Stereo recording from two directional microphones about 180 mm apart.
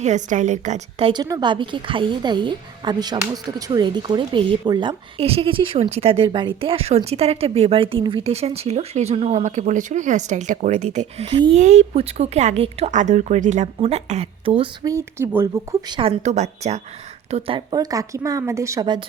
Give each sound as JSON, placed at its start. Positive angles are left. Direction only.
{"t": 0.0, "sound": "a woman's voice", "side_deg": -45}
{"t": 14.9, "sound": "speech", "side_deg": -15}
{"t": 16.0, "sound": "a woman's voice", "side_deg": -35}